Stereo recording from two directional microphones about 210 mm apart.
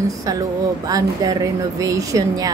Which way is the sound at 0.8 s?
15° right (ahead or behind).